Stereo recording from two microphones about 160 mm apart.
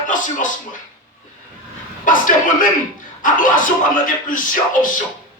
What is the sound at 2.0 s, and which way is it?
A man's voice, 55° left (ahead or behind).